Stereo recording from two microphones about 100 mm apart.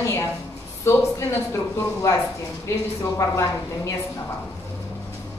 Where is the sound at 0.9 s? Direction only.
30° left (ahead or behind).